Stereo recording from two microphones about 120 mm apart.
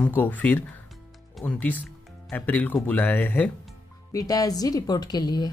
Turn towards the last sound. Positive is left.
turn(degrees=35)  # may be behind; listen again after turning